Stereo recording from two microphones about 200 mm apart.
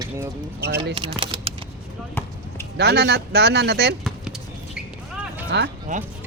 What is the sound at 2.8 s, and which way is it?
Speech, 55° right (ahead or behind).